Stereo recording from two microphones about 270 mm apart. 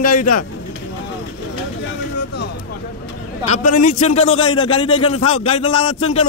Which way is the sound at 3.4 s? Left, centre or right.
Left.